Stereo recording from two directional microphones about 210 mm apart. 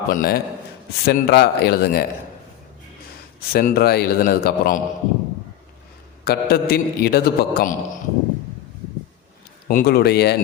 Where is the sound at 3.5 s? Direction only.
45° left (ahead or behind).